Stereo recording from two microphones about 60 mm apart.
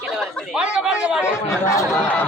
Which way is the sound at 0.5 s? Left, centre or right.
Centre.